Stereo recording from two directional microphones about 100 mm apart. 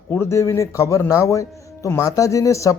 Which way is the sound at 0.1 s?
25° left (ahead or behind).